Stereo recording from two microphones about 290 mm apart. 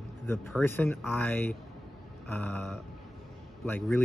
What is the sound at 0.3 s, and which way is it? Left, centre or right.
Speech, centre.